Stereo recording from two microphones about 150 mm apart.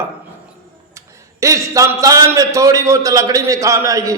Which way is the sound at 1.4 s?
20° right (ahead or behind).